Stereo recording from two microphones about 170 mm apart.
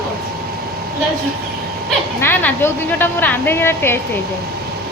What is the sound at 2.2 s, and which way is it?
A woman's voice, 10° left (ahead or behind).